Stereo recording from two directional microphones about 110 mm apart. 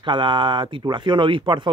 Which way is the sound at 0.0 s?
45° right (ahead or behind).